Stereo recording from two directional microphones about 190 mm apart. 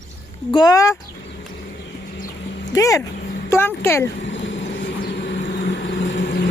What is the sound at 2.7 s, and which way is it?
Speech, 15° left (ahead or behind).